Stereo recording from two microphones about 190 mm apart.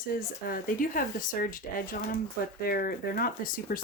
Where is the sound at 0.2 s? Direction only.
50° left (ahead or behind).